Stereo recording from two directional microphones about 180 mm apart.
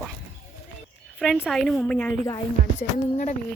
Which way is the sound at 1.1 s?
5° right (ahead or behind).